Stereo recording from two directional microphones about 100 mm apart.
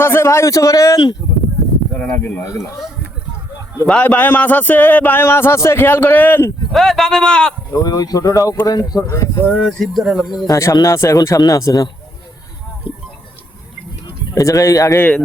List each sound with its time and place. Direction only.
0.0 s speech: 25° left (ahead or behind)
2.1 s a man's voice: 20° left (ahead or behind)
3.8 s a man's voice: 15° left (ahead or behind)
6.7 s a man's voice: centre (ahead or behind)
7.7 s speech: 35° left (ahead or behind)
9.5 s speech: 5° left (ahead or behind)
10.4 s speech: 30° left (ahead or behind)
12.9 s a sound: 20° right (ahead or behind)
14.3 s speech: 35° left (ahead or behind)